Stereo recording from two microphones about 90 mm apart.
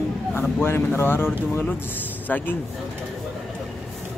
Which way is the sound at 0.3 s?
25° left (ahead or behind).